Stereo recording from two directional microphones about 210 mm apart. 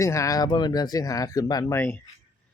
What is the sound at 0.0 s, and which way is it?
Speech, 15° left (ahead or behind).